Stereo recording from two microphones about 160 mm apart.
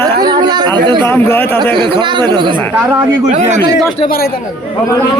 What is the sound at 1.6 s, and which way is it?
Speech, 30° right (ahead or behind).